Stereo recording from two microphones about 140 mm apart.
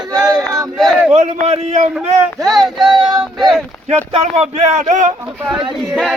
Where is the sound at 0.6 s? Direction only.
Centre (ahead or behind).